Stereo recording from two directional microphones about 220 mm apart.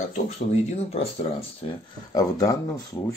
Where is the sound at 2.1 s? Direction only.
15° left (ahead or behind).